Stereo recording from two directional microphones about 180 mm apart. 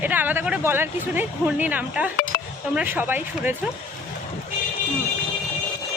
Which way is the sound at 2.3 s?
60° left (ahead or behind).